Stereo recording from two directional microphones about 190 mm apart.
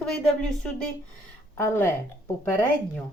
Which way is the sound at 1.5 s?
10° left (ahead or behind).